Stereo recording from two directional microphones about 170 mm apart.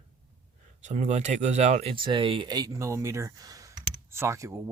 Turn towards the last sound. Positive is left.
turn(degrees=-15)  # may be behind; listen again after turning